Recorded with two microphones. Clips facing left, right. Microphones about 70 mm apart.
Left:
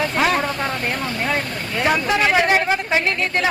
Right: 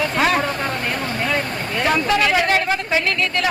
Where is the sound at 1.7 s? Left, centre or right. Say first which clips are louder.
Even; centre; by 3.4 s left.